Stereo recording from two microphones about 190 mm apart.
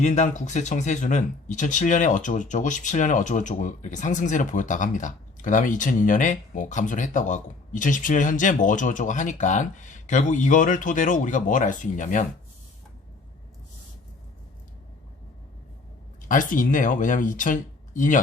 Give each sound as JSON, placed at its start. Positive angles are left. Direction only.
{"t": 0.0, "sound": "speech", "side_deg": 40}
{"t": 16.3, "sound": "speech", "side_deg": 45}